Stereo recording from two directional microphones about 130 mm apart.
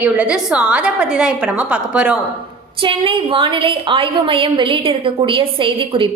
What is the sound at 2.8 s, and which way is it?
A woman's voice, 40° right (ahead or behind).